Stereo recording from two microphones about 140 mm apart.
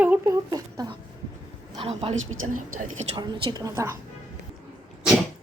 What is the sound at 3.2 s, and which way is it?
Speech, 35° right (ahead or behind).